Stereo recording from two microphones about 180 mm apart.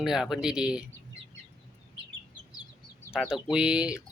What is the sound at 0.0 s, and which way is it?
Speech, 5° right (ahead or behind).